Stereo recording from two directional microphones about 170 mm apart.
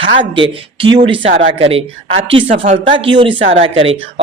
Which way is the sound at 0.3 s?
30° right (ahead or behind).